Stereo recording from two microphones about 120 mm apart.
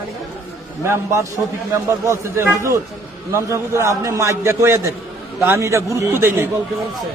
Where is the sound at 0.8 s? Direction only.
20° right (ahead or behind).